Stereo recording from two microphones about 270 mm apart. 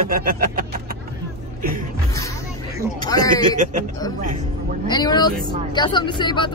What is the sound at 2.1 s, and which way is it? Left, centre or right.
Speech, centre.